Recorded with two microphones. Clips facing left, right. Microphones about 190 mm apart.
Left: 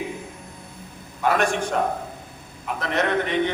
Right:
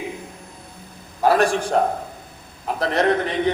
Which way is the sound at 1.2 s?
35° right (ahead or behind).